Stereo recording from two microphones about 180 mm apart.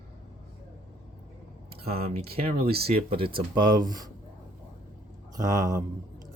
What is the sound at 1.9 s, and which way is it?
Speech, 35° right (ahead or behind).